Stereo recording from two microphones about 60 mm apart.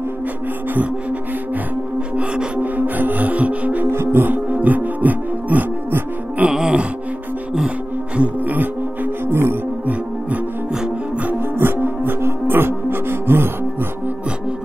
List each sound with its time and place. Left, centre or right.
2.1 s music: centre
3.9 s music: right
6.5 s music: centre
8.2 s music: right
11.2 s music: right